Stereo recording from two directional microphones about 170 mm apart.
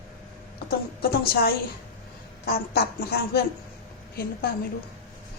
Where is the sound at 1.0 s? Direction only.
65° left (ahead or behind).